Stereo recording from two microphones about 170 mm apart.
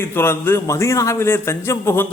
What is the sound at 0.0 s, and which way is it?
A man's voice, 15° left (ahead or behind).